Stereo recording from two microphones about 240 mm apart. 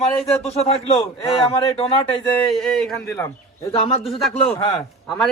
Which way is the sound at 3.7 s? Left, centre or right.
Left.